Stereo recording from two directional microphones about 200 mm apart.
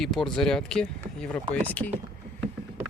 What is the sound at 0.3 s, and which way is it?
Speech, 5° left (ahead or behind).